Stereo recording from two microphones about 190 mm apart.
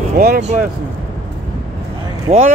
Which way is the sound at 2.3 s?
35° right (ahead or behind).